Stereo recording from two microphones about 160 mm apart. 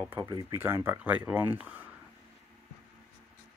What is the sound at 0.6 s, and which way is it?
Speech, 15° right (ahead or behind).